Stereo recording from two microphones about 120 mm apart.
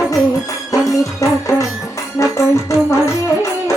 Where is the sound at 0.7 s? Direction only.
30° left (ahead or behind).